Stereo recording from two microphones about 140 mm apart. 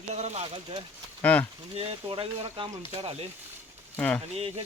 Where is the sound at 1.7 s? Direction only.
40° right (ahead or behind).